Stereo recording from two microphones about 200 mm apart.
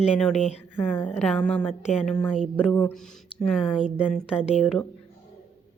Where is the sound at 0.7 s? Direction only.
10° left (ahead or behind).